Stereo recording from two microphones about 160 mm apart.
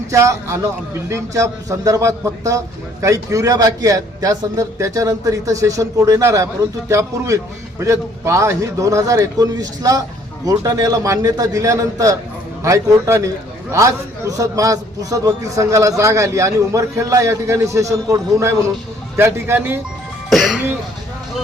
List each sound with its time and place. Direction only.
0.1 s a man's voice: 20° right (ahead or behind)
20.3 s speech: centre (ahead or behind)